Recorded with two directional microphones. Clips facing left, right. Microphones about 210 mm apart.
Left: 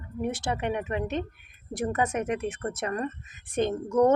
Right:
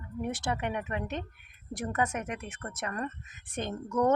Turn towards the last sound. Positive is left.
turn(degrees=20)  # may be behind; listen again after turning